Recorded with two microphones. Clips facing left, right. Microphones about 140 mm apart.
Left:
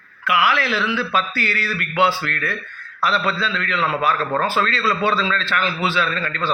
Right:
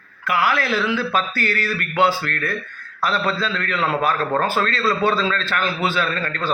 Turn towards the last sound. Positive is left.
turn(degrees=-45)  # may be behind; listen again after turning